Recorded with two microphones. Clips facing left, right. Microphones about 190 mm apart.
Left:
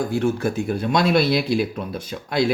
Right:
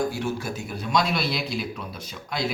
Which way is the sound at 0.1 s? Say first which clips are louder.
Left 8 dB; 55° left (ahead or behind).